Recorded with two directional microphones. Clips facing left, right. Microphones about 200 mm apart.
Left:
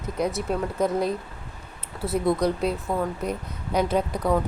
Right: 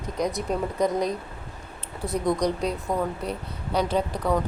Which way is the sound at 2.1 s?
5° left (ahead or behind).